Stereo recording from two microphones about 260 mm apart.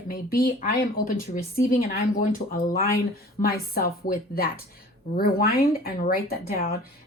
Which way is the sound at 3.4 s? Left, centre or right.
Left.